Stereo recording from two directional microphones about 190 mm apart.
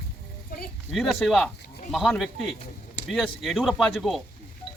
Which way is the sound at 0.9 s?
Centre (ahead or behind).